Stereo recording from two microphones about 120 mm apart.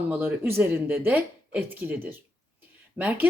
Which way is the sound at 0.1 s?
20° right (ahead or behind).